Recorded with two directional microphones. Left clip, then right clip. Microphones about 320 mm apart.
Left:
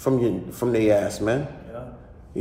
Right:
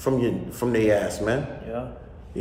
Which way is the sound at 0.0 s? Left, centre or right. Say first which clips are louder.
Left 2 dB; centre.